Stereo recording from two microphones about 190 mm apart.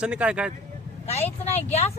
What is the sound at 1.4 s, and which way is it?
Speech, 35° left (ahead or behind).